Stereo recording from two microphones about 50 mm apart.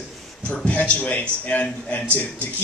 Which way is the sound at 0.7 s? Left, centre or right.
Left.